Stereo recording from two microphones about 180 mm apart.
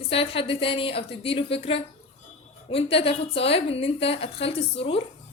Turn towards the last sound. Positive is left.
turn(degrees=30)  # may be behind; listen again after turning